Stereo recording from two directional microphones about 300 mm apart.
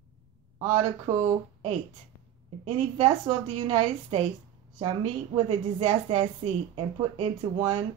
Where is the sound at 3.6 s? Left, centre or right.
Right.